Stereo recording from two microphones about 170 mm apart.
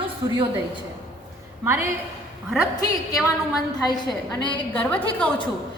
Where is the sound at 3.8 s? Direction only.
25° left (ahead or behind).